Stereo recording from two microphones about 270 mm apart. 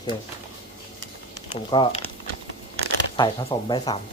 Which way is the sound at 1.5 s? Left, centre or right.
Centre.